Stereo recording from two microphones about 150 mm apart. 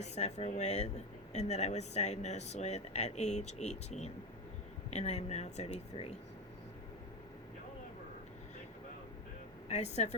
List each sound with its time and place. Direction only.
0.0 s speech: 50° left (ahead or behind)
9.6 s speech: 50° left (ahead or behind)